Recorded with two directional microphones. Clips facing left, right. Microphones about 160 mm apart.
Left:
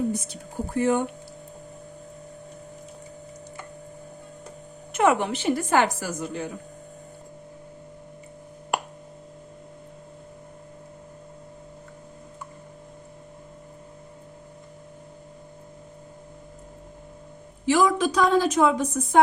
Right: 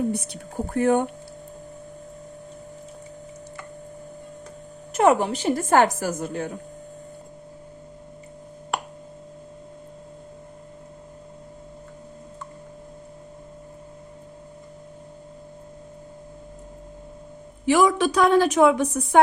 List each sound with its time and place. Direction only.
0.1 s speech: 65° right (ahead or behind)
4.9 s a woman's voice: 35° right (ahead or behind); by 6.5 s 50° right (ahead or behind)
17.7 s a woman's voice: 70° right (ahead or behind)